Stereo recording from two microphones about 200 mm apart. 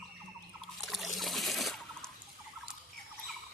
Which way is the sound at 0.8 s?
Centre (ahead or behind).